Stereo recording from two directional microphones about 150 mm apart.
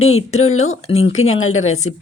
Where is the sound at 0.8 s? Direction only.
45° left (ahead or behind).